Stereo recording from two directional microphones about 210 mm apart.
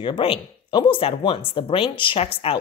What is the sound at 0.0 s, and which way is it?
Speech, 25° left (ahead or behind).